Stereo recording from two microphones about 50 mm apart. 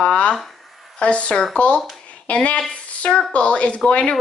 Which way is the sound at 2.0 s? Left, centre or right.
Left.